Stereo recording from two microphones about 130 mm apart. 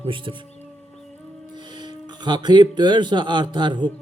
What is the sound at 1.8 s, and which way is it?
Speech, 35° right (ahead or behind).